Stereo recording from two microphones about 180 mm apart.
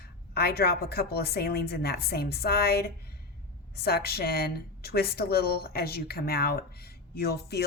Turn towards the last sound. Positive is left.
turn(degrees=60)  # may be behind; listen again after turning